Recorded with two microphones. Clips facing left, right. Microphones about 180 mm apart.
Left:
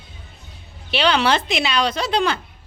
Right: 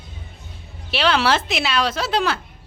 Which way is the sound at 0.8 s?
Centre (ahead or behind).